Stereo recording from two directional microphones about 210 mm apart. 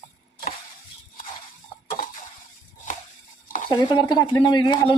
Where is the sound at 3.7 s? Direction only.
20° left (ahead or behind).